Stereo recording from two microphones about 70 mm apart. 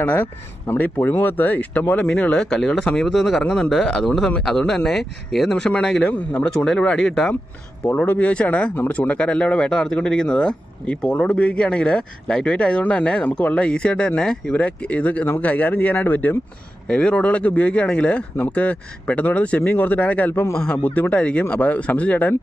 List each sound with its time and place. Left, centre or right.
0.0 s speech: left
2.5 s speech: centre
3.4 s speech: left
3.7 s speech: centre
5.5 s speech: centre
7.8 s speech: left